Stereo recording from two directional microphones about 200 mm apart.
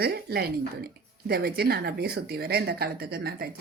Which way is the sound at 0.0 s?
50° right (ahead or behind).